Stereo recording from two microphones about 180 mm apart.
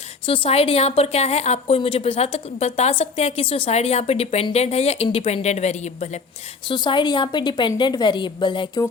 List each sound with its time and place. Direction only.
0.3 s a woman's voice: 30° left (ahead or behind)
6.7 s a woman's voice: 25° left (ahead or behind)